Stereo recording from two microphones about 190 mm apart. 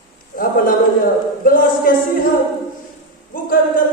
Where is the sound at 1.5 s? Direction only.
50° left (ahead or behind).